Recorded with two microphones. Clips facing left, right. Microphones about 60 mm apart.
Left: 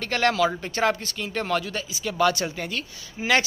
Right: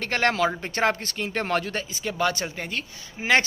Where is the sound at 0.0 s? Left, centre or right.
Right.